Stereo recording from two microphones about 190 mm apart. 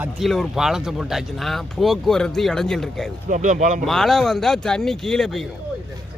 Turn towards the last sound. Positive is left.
turn(degrees=0)  # may be behind; listen again after turning